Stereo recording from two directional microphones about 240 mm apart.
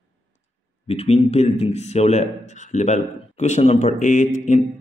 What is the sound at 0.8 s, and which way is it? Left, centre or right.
A man's voice, left.